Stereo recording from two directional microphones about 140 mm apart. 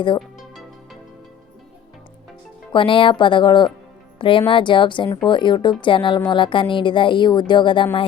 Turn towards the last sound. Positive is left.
turn(degrees=35)  # may be behind; listen again after turning